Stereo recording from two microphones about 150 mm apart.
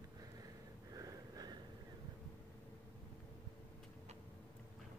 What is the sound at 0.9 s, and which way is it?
Sniff, 25° right (ahead or behind).